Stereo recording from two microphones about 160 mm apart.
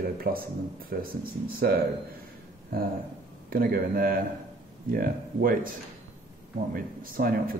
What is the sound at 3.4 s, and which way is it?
A man's voice, 70° right (ahead or behind).